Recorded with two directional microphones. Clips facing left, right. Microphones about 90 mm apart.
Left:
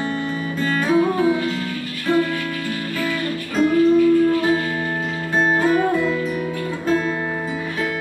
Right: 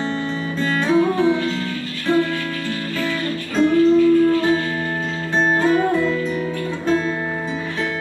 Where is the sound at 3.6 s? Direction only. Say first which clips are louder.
Right 1 dB; 30° right (ahead or behind).